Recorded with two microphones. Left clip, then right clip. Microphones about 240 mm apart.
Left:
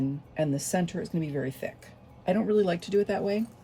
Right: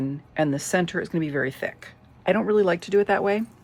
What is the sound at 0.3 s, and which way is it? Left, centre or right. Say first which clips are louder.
Speech: right 6 dB; right.